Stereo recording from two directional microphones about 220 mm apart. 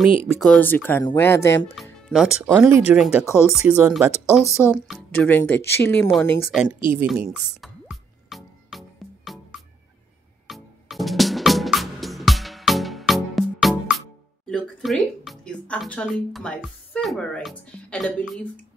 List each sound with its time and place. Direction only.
0.4 s speech: 5° left (ahead or behind)
1.8 s speech: centre (ahead or behind)
2.5 s speech: 10° right (ahead or behind); by 6.4 s 5° left (ahead or behind)
6.7 s speech: 20° left (ahead or behind)
7.2 s music: centre (ahead or behind)
14.5 s speech: centre (ahead or behind)